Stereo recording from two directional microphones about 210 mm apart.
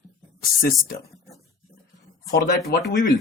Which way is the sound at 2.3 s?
50° left (ahead or behind).